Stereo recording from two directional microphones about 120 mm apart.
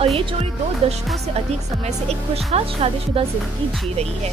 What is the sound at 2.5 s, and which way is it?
Speech, 55° right (ahead or behind).